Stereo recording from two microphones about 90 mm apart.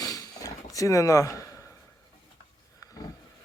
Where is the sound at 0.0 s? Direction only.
45° left (ahead or behind).